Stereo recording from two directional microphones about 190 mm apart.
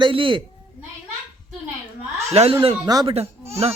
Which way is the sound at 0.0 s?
25° right (ahead or behind).